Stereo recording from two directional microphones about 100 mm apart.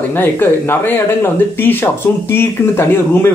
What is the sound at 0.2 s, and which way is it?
Speech, 20° left (ahead or behind).